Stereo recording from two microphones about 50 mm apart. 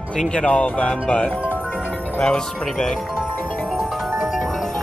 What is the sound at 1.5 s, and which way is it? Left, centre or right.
Music, left.